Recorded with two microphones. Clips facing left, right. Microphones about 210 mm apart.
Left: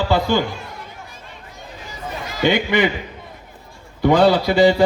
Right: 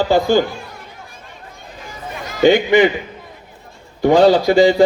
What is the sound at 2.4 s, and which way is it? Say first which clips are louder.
Speech: right 6 dB; 45° right (ahead or behind).